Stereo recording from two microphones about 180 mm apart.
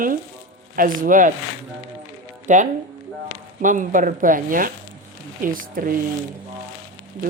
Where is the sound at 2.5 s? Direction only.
45° right (ahead or behind).